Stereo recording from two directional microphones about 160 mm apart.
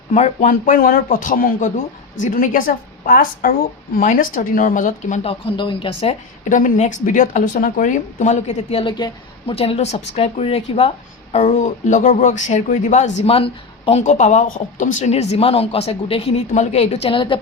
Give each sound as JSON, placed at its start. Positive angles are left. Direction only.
{"t": 0.1, "sound": "a woman's voice", "side_deg": 50}
{"t": 6.6, "sound": "speech", "side_deg": 50}
{"t": 14.0, "sound": "speech", "side_deg": 45}